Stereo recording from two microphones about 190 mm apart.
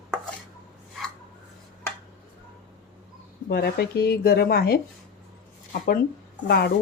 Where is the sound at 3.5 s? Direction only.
55° left (ahead or behind).